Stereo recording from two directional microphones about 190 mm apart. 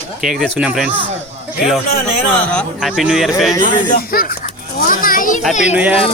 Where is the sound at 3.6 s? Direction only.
50° left (ahead or behind).